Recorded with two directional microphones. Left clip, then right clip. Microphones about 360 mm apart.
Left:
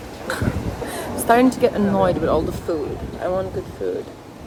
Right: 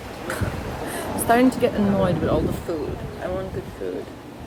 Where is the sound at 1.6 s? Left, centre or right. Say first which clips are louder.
Left 3 dB; centre.